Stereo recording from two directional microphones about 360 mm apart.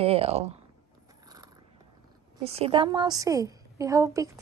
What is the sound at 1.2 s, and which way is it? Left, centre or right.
Biting, centre.